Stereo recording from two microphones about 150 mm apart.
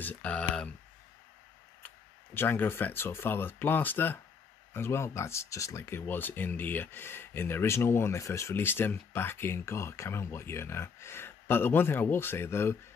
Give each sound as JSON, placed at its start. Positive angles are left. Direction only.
{"t": 0.0, "sound": "speech", "side_deg": 10}
{"t": 2.3, "sound": "speech", "side_deg": 15}